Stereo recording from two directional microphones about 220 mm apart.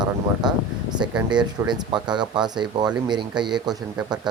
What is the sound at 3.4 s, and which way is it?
Speech, 20° right (ahead or behind).